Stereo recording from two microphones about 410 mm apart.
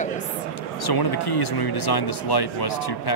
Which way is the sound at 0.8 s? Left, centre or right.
Left.